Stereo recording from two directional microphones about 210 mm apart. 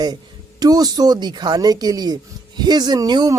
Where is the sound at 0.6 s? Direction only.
20° right (ahead or behind).